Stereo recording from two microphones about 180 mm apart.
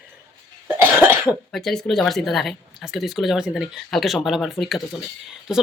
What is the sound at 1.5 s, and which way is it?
Speech, centre (ahead or behind).